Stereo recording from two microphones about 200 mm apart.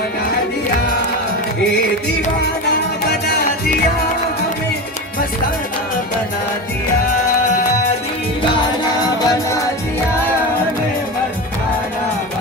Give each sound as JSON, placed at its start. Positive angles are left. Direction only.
{"t": 9.0, "sound": "music", "side_deg": 15}